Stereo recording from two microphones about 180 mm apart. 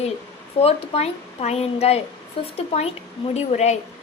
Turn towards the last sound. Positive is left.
turn(degrees=40)  # may be behind; listen again after turning